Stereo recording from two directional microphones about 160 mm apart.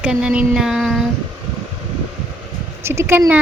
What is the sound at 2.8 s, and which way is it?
Speech, 15° right (ahead or behind).